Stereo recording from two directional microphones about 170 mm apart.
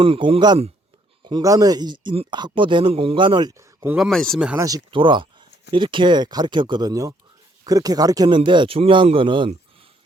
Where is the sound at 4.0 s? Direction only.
5° left (ahead or behind).